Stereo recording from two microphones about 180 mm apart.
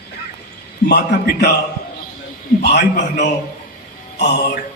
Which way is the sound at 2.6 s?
65° left (ahead or behind).